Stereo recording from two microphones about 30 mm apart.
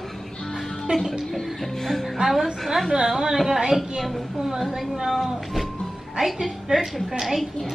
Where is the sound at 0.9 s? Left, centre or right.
Right.